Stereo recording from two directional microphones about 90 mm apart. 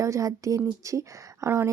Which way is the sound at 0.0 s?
35° right (ahead or behind).